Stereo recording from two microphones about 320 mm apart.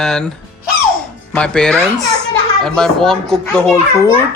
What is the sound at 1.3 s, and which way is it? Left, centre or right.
Speech, centre.